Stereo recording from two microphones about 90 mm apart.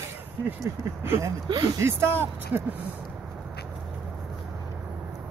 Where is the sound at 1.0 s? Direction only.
30° right (ahead or behind).